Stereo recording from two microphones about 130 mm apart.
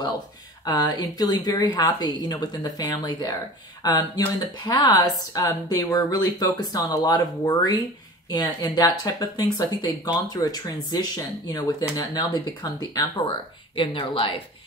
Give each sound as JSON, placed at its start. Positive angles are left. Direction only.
{"t": 0.7, "sound": "speech", "side_deg": 30}
{"t": 13.7, "sound": "a woman's voice", "side_deg": 40}